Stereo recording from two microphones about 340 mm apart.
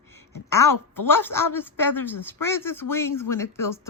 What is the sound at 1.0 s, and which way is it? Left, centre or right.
Speech, centre.